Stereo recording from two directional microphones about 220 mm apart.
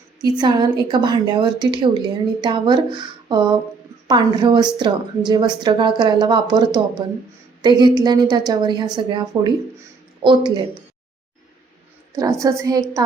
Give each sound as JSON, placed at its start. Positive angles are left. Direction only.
{"t": 0.2, "sound": "a woman's voice", "side_deg": -20}
{"t": 12.1, "sound": "a woman's voice", "side_deg": -15}